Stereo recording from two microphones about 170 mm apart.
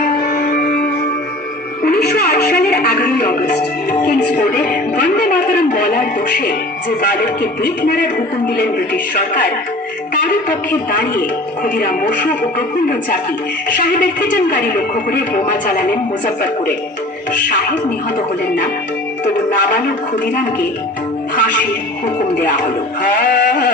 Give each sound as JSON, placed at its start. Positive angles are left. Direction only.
{"t": 0.2, "sound": "music", "side_deg": 60}
{"t": 1.8, "sound": "music", "side_deg": 65}
{"t": 4.3, "sound": "music", "side_deg": 50}
{"t": 7.0, "sound": "a man's voice", "side_deg": 55}
{"t": 10.9, "sound": "speech", "side_deg": 55}
{"t": 13.7, "sound": "a man's voice", "side_deg": 55}
{"t": 19.2, "sound": "music", "side_deg": 55}
{"t": 21.3, "sound": "music", "side_deg": 55}
{"t": 23.0, "sound": "a man's voice", "side_deg": 55}